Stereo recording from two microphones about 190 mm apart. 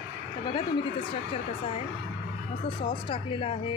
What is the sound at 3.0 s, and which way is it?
Speech, 25° left (ahead or behind).